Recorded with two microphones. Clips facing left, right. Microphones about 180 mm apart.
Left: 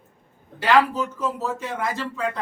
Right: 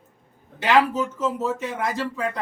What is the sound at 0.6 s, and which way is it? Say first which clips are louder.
Speech: even; 20° right (ahead or behind).